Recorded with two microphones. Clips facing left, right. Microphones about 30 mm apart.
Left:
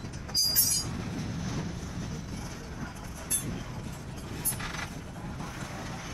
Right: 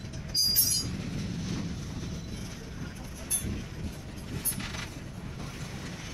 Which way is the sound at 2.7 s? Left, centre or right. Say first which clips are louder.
Left 1 dB; centre.